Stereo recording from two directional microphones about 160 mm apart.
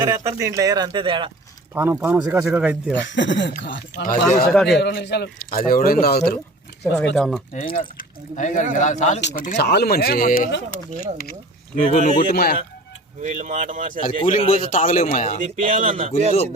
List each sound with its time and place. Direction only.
0.0 s speech: 25° right (ahead or behind)
1.7 s speech: 15° right (ahead or behind)
3.2 s speech: 90° left; by 4.4 s 60° left (ahead or behind)
4.5 s speech: centre (ahead or behind)
4.8 s speech: 90° left; by 6.4 s 75° left (ahead or behind)
6.9 s speech: 5° left (ahead or behind)
7.5 s a man's voice: 60° left (ahead or behind)
9.6 s speech: 90° left; by 10.6 s 60° left (ahead or behind)
11.9 s a man's voice: 50° left (ahead or behind)
13.2 s speech: 50° right (ahead or behind)
14.2 s a man's voice: 35° left (ahead or behind)
14.7 s a man's voice: 50° left (ahead or behind)
15.5 s speech: 55° right (ahead or behind)